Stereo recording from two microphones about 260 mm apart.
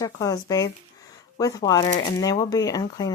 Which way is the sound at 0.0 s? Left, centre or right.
Centre.